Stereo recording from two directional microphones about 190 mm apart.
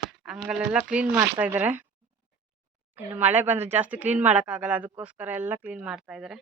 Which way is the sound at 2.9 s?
10° right (ahead or behind).